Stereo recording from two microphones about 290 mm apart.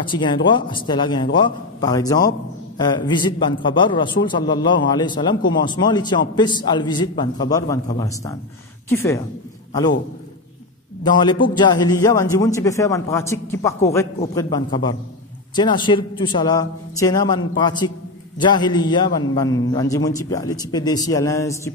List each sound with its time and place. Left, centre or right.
0.0 s a man's voice: centre
11.1 s a man's voice: centre